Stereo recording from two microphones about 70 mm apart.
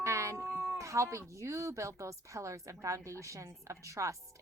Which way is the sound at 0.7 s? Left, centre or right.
Right.